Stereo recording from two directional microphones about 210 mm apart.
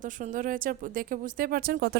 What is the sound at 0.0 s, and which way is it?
Speech, 40° right (ahead or behind).